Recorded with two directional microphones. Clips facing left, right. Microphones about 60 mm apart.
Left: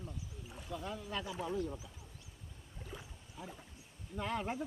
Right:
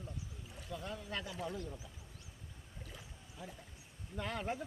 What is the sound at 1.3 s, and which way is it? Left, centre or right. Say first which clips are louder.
Speech: left 5 dB; left.